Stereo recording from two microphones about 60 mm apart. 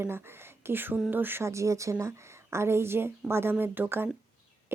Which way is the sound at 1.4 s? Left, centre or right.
Right.